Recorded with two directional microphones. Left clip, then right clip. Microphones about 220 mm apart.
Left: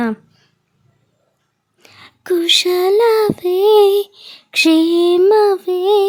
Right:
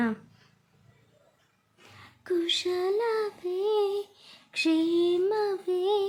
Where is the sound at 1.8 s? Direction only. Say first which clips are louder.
Left 12 dB; 45° left (ahead or behind).